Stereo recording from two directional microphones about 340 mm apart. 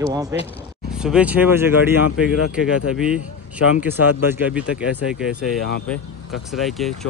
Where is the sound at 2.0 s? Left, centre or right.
Left.